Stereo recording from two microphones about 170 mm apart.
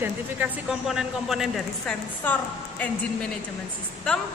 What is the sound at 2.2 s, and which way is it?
A woman's voice, 10° left (ahead or behind).